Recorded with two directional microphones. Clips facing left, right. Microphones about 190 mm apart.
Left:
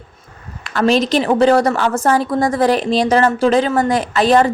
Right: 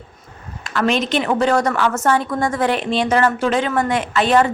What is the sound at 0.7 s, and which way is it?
A woman's voice, 35° left (ahead or behind).